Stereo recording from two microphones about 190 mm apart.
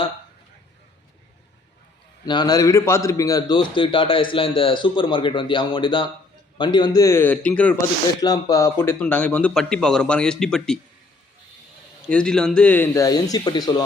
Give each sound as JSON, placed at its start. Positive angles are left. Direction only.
{"t": 2.2, "sound": "a man's voice", "side_deg": 25}
{"t": 8.2, "sound": "a man's voice", "side_deg": 20}
{"t": 12.0, "sound": "a man's voice", "side_deg": 5}